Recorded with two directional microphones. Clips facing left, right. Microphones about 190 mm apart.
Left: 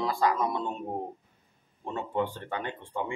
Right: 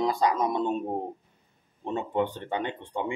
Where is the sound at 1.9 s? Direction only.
20° right (ahead or behind).